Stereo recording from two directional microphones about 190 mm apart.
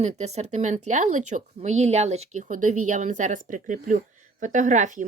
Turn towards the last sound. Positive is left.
turn(degrees=-40)  # may be behind; listen again after turning